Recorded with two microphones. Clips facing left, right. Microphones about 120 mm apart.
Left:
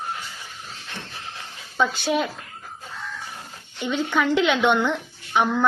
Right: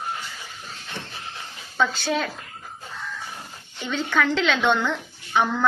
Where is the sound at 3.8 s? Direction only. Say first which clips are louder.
Left 1 dB; 15° left (ahead or behind).